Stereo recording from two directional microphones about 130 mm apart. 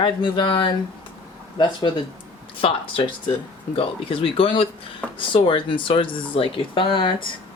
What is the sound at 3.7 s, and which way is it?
Speech, 45° left (ahead or behind).